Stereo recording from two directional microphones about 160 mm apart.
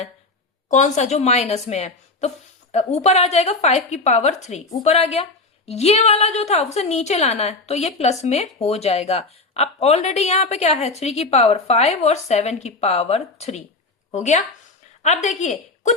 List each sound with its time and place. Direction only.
0.7 s a woman's voice: 50° left (ahead or behind)